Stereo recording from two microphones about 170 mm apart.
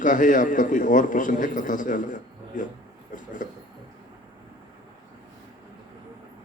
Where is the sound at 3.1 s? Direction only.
50° left (ahead or behind).